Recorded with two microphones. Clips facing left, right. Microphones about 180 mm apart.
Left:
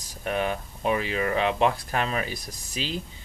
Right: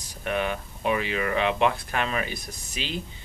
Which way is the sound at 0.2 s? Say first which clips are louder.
Even; 35° left (ahead or behind).